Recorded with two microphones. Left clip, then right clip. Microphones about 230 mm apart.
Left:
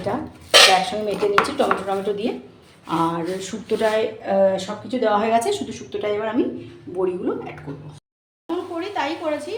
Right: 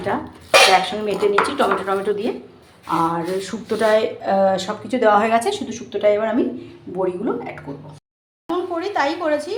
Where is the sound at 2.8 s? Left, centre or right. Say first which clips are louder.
Right 2 dB; centre.